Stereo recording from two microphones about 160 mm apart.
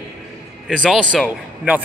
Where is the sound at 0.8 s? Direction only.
5° right (ahead or behind).